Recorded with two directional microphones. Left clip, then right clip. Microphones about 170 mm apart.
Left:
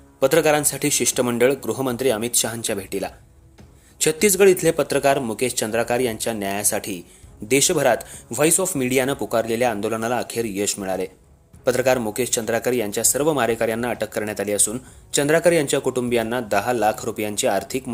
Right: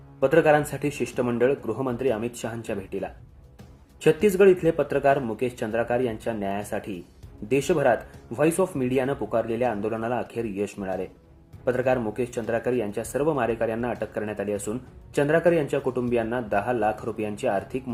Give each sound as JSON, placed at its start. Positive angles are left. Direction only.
{"t": 0.2, "sound": "speech", "side_deg": 45}
{"t": 0.7, "sound": "speech", "side_deg": 30}
{"t": 1.1, "sound": "speech", "side_deg": 40}
{"t": 7.4, "sound": "speech", "side_deg": 30}
{"t": 9.0, "sound": "speech", "side_deg": 45}
{"t": 10.3, "sound": "speech", "side_deg": 30}
{"t": 10.8, "sound": "speech", "side_deg": 40}
{"t": 12.1, "sound": "speech", "side_deg": 30}
{"t": 15.4, "sound": "speech", "side_deg": 30}